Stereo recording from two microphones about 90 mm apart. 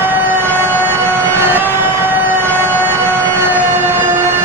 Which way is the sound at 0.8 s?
25° right (ahead or behind).